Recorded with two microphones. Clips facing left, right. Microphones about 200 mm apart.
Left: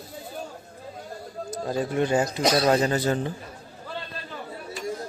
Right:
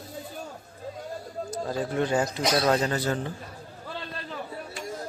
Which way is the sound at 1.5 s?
15° left (ahead or behind).